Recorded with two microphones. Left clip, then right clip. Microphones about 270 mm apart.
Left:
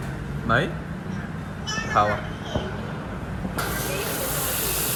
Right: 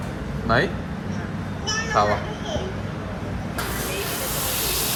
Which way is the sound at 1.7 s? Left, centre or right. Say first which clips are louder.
Right 1 dB; centre.